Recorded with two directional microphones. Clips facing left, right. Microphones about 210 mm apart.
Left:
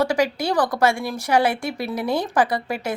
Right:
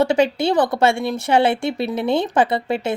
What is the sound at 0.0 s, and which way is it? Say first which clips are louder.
A woman's voice: right 4 dB; 25° right (ahead or behind).